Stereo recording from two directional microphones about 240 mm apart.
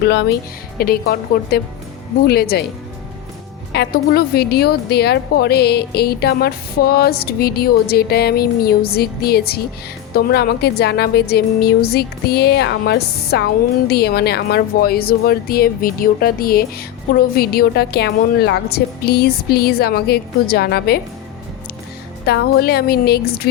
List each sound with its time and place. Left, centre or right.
0.0 s a woman's voice: left
3.7 s a woman's voice: left
22.3 s a woman's voice: left